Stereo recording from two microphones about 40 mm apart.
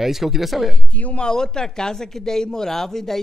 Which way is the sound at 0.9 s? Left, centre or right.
Left.